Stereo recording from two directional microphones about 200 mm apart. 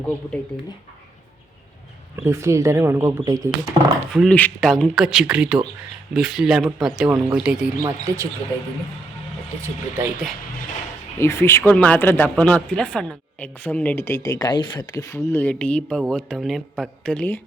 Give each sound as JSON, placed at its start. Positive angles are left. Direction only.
{"t": 2.1, "sound": "speech", "side_deg": -15}
{"t": 4.1, "sound": "speech", "side_deg": 0}
{"t": 9.6, "sound": "speech", "side_deg": -10}
{"t": 11.2, "sound": "speech", "side_deg": 15}